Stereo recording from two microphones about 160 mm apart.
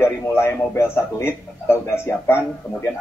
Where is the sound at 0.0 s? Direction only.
15° left (ahead or behind).